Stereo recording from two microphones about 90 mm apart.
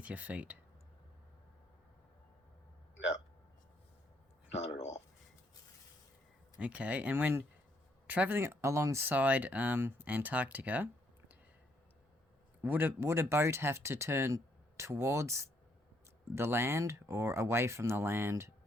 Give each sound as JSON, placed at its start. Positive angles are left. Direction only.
{"t": 0.0, "sound": "speech", "side_deg": -15}
{"t": 6.6, "sound": "speech", "side_deg": -15}
{"t": 9.0, "sound": "speech", "side_deg": -15}
{"t": 12.6, "sound": "speech", "side_deg": -20}